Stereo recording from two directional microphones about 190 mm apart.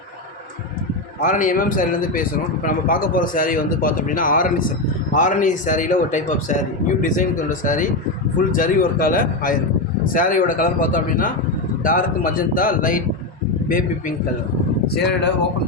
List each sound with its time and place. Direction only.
1.2 s a man's voice: 45° left (ahead or behind)
14.9 s speech: 60° left (ahead or behind)